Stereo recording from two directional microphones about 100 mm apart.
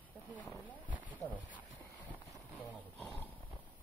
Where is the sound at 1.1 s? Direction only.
15° left (ahead or behind).